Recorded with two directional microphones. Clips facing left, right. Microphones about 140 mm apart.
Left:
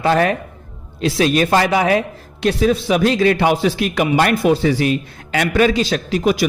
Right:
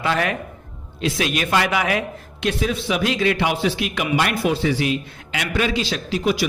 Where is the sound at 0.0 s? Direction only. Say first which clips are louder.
Left 6 dB; 40° left (ahead or behind).